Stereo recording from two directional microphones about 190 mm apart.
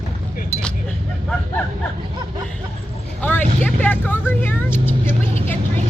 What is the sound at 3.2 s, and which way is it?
Vehicle, 10° left (ahead or behind).